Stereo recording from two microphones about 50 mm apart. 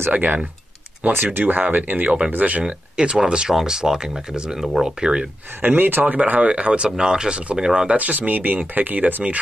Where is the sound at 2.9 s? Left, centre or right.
Centre.